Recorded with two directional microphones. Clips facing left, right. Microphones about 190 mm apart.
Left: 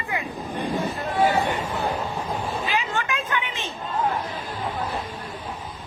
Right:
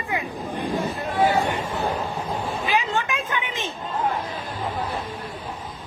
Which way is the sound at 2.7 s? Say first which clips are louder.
Right 5 dB; 15° right (ahead or behind).